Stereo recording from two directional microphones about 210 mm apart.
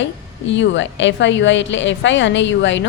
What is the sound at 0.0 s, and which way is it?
A woman's voice, 60° left (ahead or behind).